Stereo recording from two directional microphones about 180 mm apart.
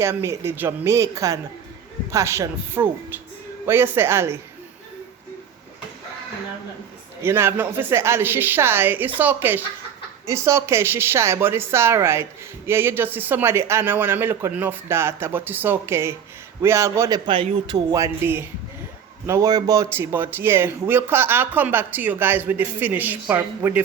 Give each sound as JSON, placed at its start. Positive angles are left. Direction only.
{"t": 0.0, "sound": "speech", "side_deg": -15}
{"t": 7.2, "sound": "speech", "side_deg": -15}
{"t": 17.2, "sound": "speech", "side_deg": -30}
{"t": 17.9, "sound": "speech", "side_deg": -15}